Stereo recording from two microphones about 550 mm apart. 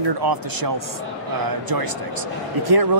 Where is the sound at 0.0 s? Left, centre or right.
Right.